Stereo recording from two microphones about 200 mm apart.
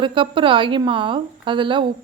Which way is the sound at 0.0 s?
25° right (ahead or behind).